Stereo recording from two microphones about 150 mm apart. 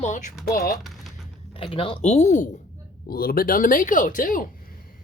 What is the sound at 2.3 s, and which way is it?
Speech, 60° left (ahead or behind).